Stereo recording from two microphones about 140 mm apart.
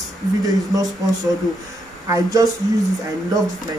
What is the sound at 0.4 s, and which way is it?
Speech, 25° right (ahead or behind).